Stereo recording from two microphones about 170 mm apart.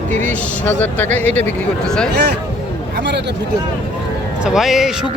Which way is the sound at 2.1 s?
75° right (ahead or behind).